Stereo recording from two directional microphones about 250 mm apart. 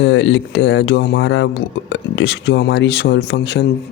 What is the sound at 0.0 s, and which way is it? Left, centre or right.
Speech, left.